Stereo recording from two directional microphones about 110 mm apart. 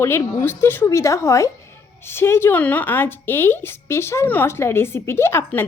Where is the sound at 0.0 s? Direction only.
20° left (ahead or behind).